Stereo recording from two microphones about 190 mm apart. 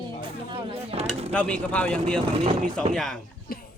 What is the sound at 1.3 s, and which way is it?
Speech, 5° left (ahead or behind).